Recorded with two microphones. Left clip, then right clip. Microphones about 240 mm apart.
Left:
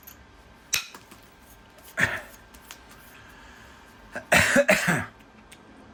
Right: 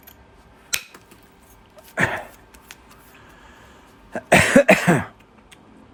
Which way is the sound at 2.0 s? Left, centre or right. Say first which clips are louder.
Right 3 dB; centre.